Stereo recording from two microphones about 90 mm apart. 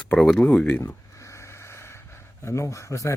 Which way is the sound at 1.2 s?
30° left (ahead or behind).